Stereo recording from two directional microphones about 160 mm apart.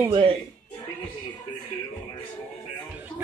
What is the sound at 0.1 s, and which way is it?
Speech, 35° right (ahead or behind).